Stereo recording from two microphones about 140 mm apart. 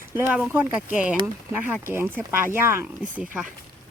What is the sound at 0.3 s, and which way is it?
Speech, 10° right (ahead or behind).